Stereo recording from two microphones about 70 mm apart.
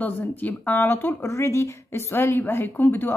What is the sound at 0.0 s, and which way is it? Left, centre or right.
Speech, left.